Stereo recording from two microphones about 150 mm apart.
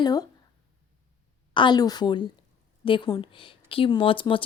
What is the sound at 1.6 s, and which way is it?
A woman's voice, 30° left (ahead or behind).